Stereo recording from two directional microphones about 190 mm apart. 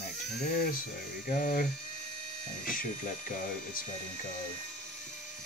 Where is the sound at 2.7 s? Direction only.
45° left (ahead or behind).